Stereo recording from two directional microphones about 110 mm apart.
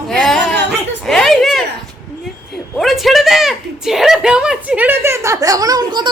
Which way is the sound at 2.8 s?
Centre (ahead or behind).